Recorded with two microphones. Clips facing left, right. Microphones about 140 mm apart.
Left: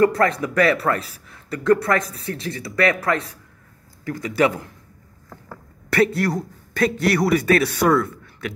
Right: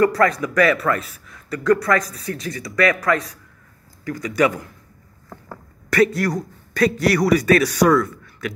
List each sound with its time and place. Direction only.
0.0 s a man's voice: 25° left (ahead or behind)
5.9 s a man's voice: 25° left (ahead or behind)